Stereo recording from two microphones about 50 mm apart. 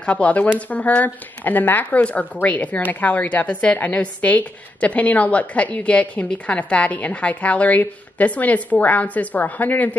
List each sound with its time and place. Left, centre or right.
0.0 s a woman's voice: left